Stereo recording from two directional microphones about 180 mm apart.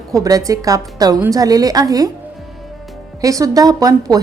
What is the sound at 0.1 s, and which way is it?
A woman's voice, 20° right (ahead or behind).